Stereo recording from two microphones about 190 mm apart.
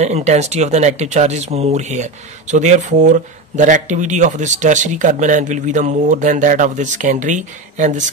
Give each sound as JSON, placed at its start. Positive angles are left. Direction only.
{"t": 0.0, "sound": "speech", "side_deg": -35}